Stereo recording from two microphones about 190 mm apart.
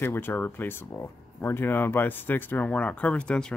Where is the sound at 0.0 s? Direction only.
10° left (ahead or behind).